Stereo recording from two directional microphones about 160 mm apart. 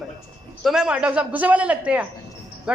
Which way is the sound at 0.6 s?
5° right (ahead or behind).